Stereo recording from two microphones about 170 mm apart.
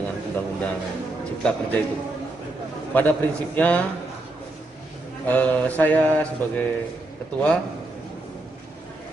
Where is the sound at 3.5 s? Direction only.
10° left (ahead or behind).